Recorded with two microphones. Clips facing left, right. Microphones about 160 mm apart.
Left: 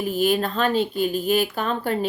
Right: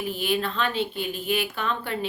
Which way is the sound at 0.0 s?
40° left (ahead or behind).